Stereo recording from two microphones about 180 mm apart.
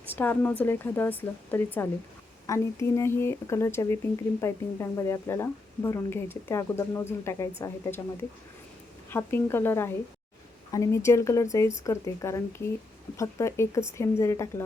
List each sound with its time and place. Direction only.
0.1 s a woman's voice: 10° left (ahead or behind)
9.0 s a woman's voice: 10° left (ahead or behind)